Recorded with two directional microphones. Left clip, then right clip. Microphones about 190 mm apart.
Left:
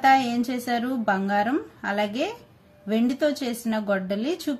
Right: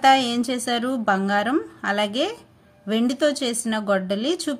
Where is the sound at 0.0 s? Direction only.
30° right (ahead or behind).